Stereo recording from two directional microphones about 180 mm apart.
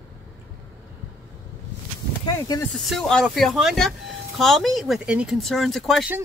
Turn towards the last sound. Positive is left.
turn(degrees=0)  # may be behind; listen again after turning